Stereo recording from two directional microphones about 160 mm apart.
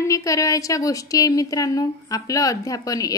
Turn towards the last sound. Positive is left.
turn(degrees=20)  # may be behind; listen again after turning